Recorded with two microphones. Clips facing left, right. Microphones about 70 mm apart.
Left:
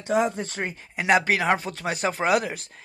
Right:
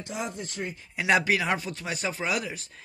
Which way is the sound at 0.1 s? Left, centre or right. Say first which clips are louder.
Left 12 dB; left.